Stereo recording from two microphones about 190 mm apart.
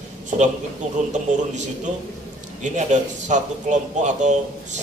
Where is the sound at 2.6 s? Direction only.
40° right (ahead or behind).